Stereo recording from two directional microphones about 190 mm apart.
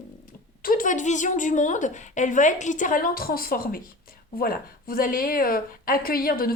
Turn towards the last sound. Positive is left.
turn(degrees=50)  # may be behind; listen again after turning